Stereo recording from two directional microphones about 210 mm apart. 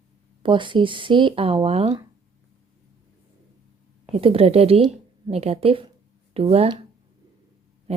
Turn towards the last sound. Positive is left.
turn(degrees=-30)  # may be behind; listen again after turning